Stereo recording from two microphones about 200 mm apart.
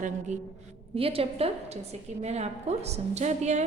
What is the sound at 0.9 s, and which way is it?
A woman's voice, 30° right (ahead or behind).